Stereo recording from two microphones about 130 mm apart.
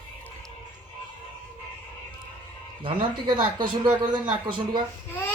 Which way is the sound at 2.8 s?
40° right (ahead or behind).